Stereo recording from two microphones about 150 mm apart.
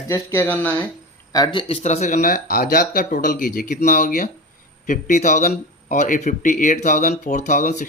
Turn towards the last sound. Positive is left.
turn(degrees=55)  # may be behind; listen again after turning